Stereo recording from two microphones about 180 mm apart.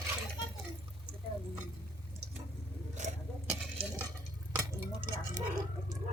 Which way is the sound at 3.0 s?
40° right (ahead or behind).